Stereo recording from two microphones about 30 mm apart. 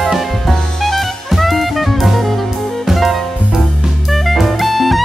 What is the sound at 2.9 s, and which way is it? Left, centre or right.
Music, centre.